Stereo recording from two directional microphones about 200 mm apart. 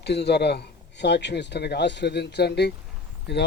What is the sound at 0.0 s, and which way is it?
Speech, 55° left (ahead or behind).